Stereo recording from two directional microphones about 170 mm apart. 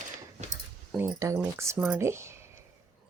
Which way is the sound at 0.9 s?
15° right (ahead or behind).